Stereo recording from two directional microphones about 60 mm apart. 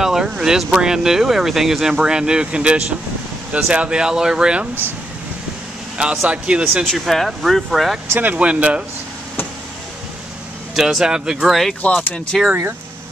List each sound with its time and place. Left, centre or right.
0.0 s speech: centre
5.9 s speech: centre
6.8 s speech: centre
8.1 s speech: right
8.4 s speech: right
10.7 s speech: centre
11.8 s speech: left
12.3 s speech: centre